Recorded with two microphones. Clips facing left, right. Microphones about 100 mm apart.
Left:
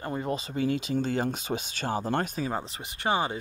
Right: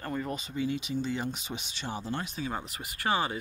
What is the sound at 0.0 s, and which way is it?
Speech, 25° left (ahead or behind).